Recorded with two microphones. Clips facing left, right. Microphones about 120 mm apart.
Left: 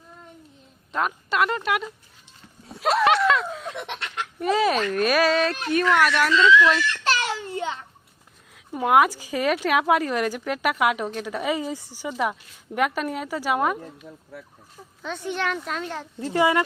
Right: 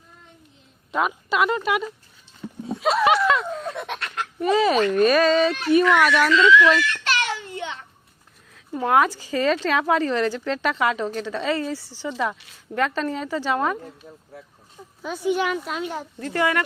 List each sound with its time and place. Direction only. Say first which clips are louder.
0.9 s speech: right 2 dB; 5° right (ahead or behind)
2.6 s a sound: right 1 dB; centre (ahead or behind)
4.4 s speech: right 3 dB; centre (ahead or behind)
6.3 s a woman's voice: right 1 dB; 30° left (ahead or behind)
7.0 s a sound: left 1 dB; 30° left (ahead or behind)
8.5 s speech: left 1 dB; 10° left (ahead or behind)
15.0 s speech: right 5 dB; 10° right (ahead or behind)
16.2 s a woman's voice: left 2 dB; 20° left (ahead or behind)